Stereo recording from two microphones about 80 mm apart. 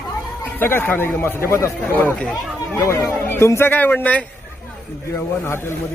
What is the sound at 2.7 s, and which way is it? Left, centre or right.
A man's voice, left.